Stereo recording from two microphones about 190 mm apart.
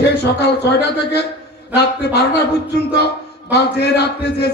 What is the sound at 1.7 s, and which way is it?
Speech, 60° left (ahead or behind).